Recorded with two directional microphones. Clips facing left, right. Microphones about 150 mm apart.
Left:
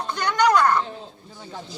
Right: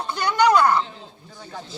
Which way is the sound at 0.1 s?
10° right (ahead or behind).